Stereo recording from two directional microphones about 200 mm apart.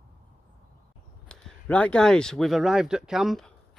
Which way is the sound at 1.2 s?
5° left (ahead or behind).